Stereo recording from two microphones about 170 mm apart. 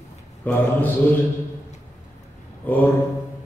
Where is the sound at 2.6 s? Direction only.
10° left (ahead or behind).